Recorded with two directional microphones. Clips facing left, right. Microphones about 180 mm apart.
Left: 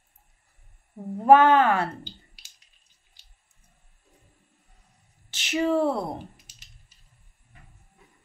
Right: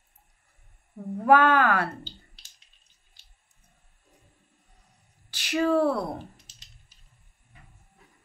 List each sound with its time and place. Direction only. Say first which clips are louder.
1.2 s speech: left 3 dB; 25° left (ahead or behind)
5.3 s speech: even; 25° left (ahead or behind)